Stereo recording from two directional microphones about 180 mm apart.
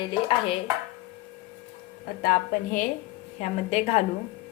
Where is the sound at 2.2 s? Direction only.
55° left (ahead or behind).